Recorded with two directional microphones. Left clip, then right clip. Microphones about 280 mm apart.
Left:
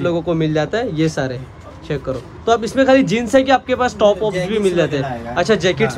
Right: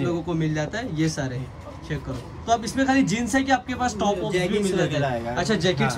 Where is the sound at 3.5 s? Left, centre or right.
Centre.